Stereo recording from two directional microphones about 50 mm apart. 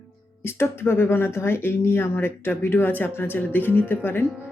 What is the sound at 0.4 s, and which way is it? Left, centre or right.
Speech, left.